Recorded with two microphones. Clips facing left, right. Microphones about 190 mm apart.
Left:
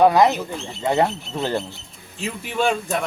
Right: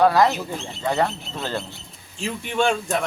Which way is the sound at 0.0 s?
20° left (ahead or behind).